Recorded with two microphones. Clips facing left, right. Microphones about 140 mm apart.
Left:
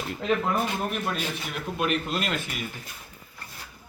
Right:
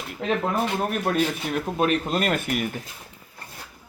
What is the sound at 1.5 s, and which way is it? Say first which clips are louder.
Speech: right 5 dB; 40° right (ahead or behind).